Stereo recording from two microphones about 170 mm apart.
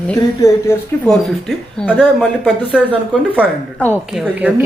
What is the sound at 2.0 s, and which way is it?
Speech, 5° right (ahead or behind).